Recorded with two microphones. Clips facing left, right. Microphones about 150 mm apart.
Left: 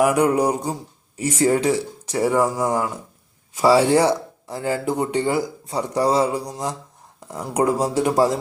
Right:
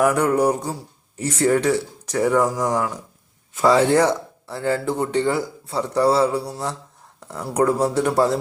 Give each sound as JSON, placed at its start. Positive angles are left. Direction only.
{"t": 0.0, "sound": "speech", "side_deg": 15}